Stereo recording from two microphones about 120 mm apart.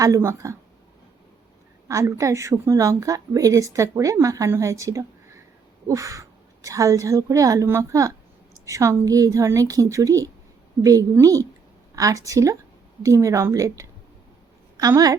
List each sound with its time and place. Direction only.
0.0 s a woman's voice: 25° right (ahead or behind)
1.9 s a woman's voice: 25° right (ahead or behind)